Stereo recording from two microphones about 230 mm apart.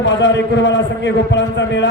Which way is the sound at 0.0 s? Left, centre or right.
Left.